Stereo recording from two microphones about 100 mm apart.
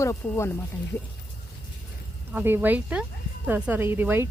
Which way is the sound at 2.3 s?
20° right (ahead or behind).